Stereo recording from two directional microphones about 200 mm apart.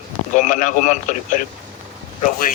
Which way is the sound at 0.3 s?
40° left (ahead or behind).